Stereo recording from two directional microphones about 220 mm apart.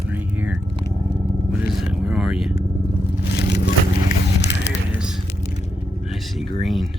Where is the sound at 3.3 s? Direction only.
50° left (ahead or behind).